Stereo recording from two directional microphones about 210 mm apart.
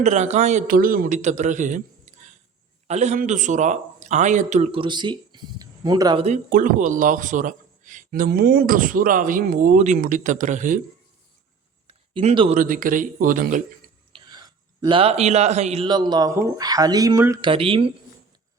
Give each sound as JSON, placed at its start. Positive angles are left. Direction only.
{"t": 0.0, "sound": "a man's voice", "side_deg": -35}
{"t": 6.2, "sound": "a man's voice", "side_deg": -35}
{"t": 11.9, "sound": "a sound", "side_deg": -25}
{"t": 12.5, "sound": "a man's voice", "side_deg": -40}
{"t": 14.1, "sound": "speech", "side_deg": -20}
{"t": 17.5, "sound": "speech", "side_deg": -25}